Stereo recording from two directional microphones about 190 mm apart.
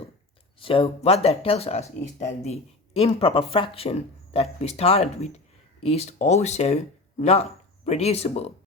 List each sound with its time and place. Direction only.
0.6 s speech: 30° left (ahead or behind)